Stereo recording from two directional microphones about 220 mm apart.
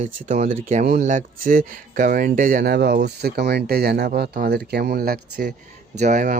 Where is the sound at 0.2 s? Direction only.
35° right (ahead or behind).